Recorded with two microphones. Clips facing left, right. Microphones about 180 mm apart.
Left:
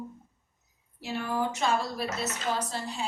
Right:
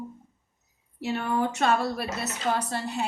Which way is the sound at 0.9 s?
65° right (ahead or behind).